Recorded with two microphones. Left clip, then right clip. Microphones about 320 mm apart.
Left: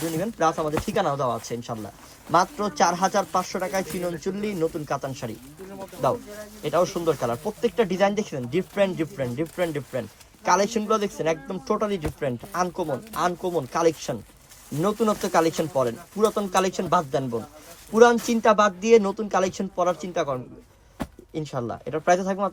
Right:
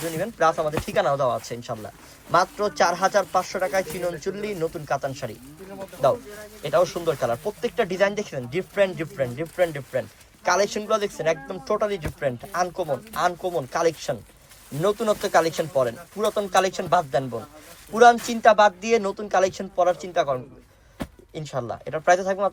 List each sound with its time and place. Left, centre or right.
0.2 s speech: left
6.7 s speech: left
21.0 s a sound: centre
21.3 s speech: left